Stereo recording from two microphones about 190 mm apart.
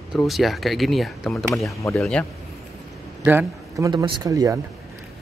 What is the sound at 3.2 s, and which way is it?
Speech, 10° right (ahead or behind).